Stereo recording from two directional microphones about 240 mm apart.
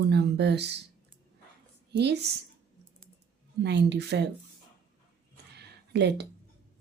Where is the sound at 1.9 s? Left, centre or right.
Right.